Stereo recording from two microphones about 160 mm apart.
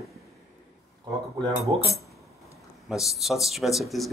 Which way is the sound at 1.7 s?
30° right (ahead or behind).